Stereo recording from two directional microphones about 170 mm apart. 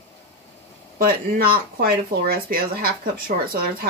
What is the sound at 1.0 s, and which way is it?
Speech, 60° right (ahead or behind).